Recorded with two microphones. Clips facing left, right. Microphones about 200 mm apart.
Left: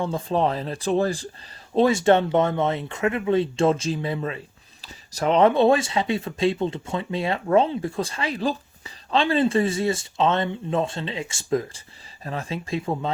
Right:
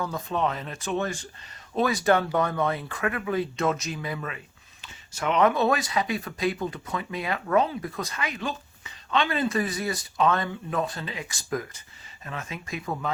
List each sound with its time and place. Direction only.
0.0 s speech: 30° left (ahead or behind)